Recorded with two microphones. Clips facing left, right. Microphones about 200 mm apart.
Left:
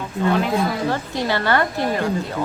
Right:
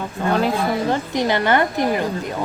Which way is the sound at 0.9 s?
20° right (ahead or behind).